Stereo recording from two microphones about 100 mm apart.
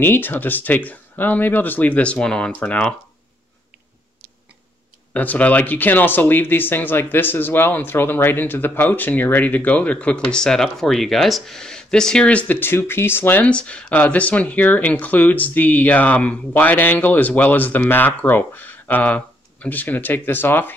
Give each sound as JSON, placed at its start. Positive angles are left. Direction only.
{"t": 0.0, "sound": "speech", "side_deg": 20}
{"t": 5.1, "sound": "speech", "side_deg": 15}